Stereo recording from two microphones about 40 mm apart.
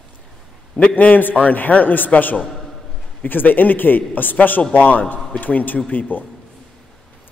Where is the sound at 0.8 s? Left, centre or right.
Left.